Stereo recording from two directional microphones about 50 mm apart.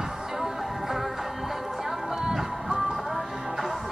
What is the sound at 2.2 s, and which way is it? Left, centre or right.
Music, centre.